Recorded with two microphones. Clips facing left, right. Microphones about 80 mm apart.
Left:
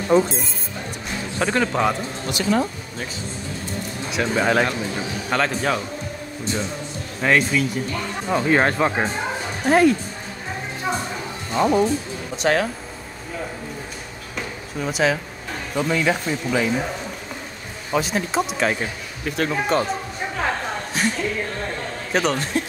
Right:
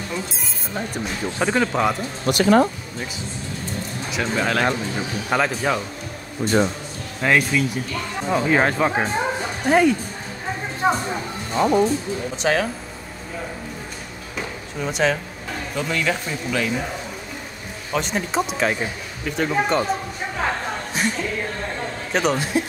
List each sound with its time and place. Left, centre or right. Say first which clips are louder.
0.1 s speech: left 14 dB; left
1.4 s speech: even; centre
2.2 s speech: right 6 dB; right
4.1 s speech: left 3 dB; centre
4.9 s speech: right 1 dB; centre
6.4 s speech: right 8 dB; right
7.2 s speech: even; centre
10.8 s speech: right 6 dB; right
11.5 s speech: even; centre
14.3 s a sound: even; centre
15.7 s speech: left 3 dB; centre
17.9 s speech: left 1 dB; centre
20.9 s a sound: left 1 dB; centre
22.1 s speech: even; centre